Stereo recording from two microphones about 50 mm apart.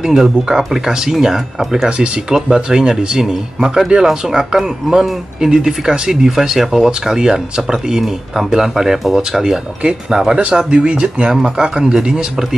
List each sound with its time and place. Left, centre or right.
0.0 s speech: centre